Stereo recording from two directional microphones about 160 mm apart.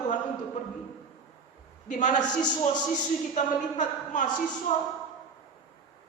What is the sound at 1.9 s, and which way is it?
Speech, 50° left (ahead or behind).